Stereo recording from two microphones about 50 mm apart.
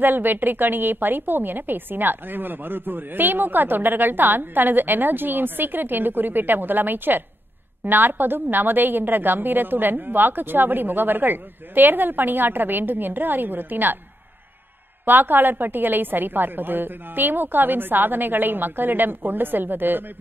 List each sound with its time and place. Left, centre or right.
0.0 s a woman's voice: right
15.0 s a woman's voice: right